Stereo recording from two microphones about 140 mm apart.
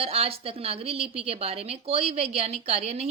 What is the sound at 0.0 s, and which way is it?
A woman's voice, 45° right (ahead or behind).